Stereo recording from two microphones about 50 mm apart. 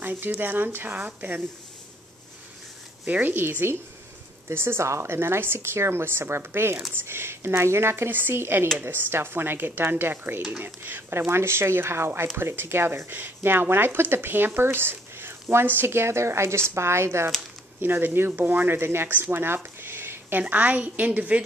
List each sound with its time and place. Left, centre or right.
0.0 s a sound: right
0.4 s speech: right
3.1 s speech: right
3.3 s speech: right
4.5 s a woman's voice: right
17.7 s a woman's voice: right